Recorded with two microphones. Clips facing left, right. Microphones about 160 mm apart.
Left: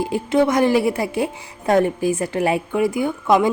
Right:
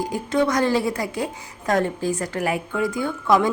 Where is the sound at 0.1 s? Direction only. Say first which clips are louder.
Left 4 dB; 25° left (ahead or behind).